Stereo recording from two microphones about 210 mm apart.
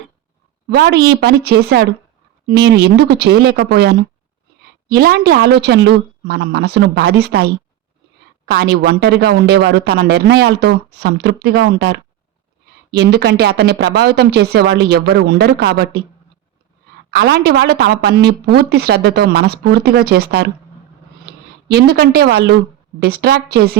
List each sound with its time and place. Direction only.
0.7 s speech: 50° right (ahead or behind)
17.1 s speech: 45° right (ahead or behind)
21.7 s speech: 50° right (ahead or behind)